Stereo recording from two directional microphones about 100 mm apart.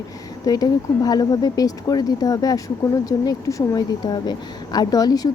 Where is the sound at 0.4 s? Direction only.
40° left (ahead or behind).